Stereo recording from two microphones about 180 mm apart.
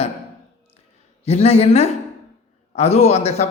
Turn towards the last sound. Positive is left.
turn(degrees=35)  # may be behind; listen again after turning